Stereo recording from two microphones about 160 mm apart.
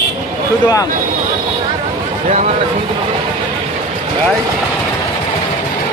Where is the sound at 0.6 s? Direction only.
25° left (ahead or behind).